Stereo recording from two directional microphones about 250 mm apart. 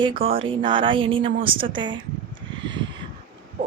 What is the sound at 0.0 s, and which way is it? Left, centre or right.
Speech, right.